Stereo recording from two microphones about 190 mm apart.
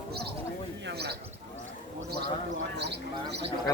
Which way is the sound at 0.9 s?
60° right (ahead or behind).